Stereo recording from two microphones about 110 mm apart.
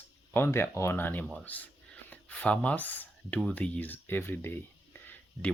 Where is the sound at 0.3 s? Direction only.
20° left (ahead or behind).